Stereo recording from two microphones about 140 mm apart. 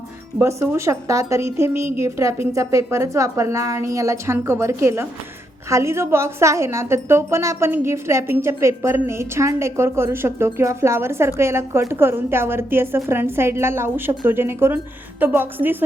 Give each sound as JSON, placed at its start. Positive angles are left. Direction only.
{"t": 0.4, "sound": "a woman's voice", "side_deg": -20}